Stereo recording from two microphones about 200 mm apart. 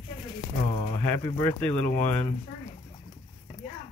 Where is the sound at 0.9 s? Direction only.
15° left (ahead or behind).